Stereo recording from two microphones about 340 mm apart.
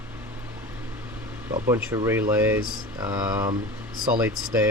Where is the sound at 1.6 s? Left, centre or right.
Centre.